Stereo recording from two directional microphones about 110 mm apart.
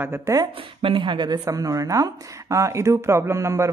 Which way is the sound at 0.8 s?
45° right (ahead or behind).